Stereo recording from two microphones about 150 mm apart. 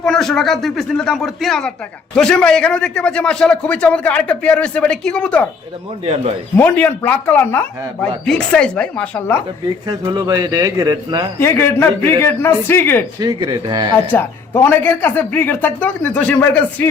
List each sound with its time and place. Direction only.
0.0 s a man's voice: 5° left (ahead or behind)
6.6 s a man's voice: 10° left (ahead or behind)
9.8 s speech: 25° right (ahead or behind)
11.3 s a man's voice: 15° left (ahead or behind)
13.1 s speech: 30° right (ahead or behind)
14.1 s a man's voice: 15° left (ahead or behind)